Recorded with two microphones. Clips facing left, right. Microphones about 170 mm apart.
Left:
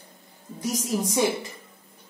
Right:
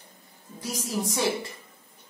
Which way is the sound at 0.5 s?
20° left (ahead or behind).